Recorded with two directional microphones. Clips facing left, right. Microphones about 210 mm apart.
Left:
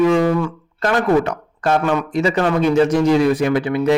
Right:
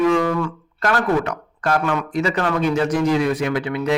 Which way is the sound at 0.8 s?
25° left (ahead or behind).